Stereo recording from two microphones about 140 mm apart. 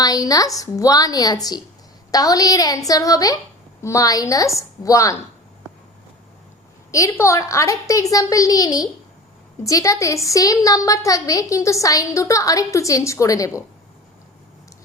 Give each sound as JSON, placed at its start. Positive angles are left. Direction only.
{"t": 0.0, "sound": "a woman's voice", "side_deg": 25}
{"t": 6.9, "sound": "a woman's voice", "side_deg": 20}